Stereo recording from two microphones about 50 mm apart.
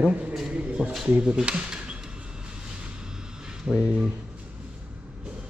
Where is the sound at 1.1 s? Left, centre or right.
Right.